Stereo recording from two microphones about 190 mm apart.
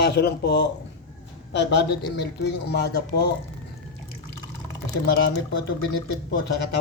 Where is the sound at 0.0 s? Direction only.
60° left (ahead or behind).